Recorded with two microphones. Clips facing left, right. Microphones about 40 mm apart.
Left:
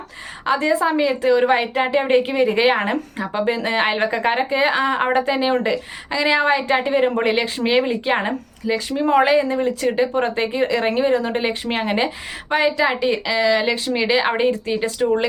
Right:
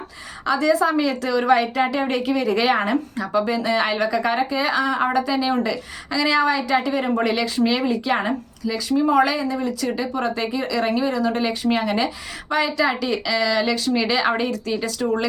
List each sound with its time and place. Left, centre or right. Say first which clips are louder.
0.4 s a woman's voice: even; left